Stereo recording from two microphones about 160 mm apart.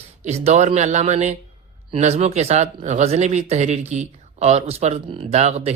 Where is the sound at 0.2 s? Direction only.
45° right (ahead or behind).